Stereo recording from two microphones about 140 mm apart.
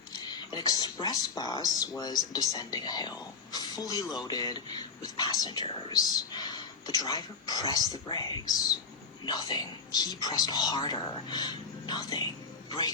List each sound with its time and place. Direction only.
0.1 s speech: 30° left (ahead or behind)